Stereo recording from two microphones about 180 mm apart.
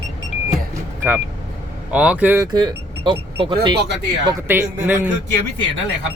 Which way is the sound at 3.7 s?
70° right (ahead or behind).